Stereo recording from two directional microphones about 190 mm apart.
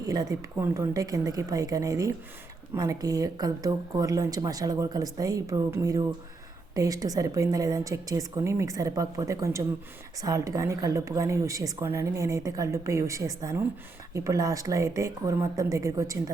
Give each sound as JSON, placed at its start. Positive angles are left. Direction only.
{"t": 0.0, "sound": "a woman's voice", "side_deg": -20}